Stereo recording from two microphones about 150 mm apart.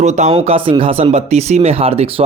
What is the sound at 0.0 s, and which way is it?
Speech, 50° right (ahead or behind).